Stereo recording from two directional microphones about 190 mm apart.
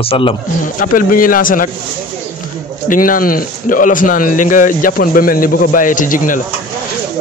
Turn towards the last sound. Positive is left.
turn(degrees=45)  # may be behind; listen again after turning